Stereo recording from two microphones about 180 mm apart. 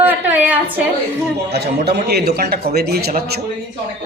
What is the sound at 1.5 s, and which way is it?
A man's voice, 65° right (ahead or behind).